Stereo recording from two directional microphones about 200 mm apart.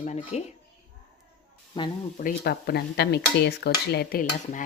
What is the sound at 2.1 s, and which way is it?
Cutlery, 50° left (ahead or behind).